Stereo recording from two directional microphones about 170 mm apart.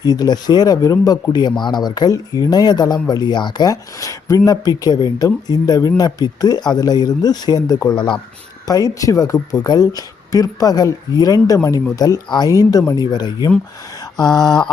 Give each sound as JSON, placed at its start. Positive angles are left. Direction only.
{"t": 0.0, "sound": "speech", "side_deg": 25}
{"t": 14.0, "sound": "mantra", "side_deg": 25}